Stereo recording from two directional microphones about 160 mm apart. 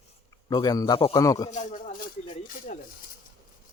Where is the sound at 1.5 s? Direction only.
50° left (ahead or behind).